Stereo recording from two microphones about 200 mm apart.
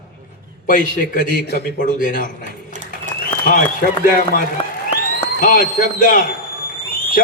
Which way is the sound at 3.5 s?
45° left (ahead or behind).